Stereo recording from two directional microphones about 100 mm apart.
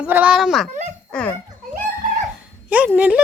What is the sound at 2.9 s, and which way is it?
Speech, 15° right (ahead or behind).